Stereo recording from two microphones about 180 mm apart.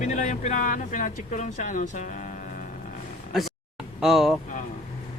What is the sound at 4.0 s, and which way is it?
Speech, centre (ahead or behind).